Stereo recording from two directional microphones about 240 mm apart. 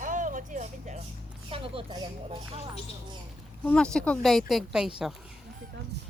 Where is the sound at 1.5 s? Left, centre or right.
Right.